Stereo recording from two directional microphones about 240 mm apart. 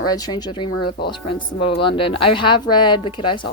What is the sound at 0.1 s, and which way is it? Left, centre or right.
Speech, centre.